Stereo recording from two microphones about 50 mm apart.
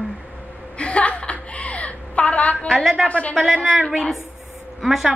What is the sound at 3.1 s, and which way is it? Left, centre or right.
Speech, left.